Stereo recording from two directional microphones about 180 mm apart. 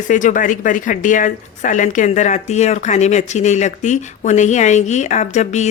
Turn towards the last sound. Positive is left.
turn(degrees=40)  # may be behind; listen again after turning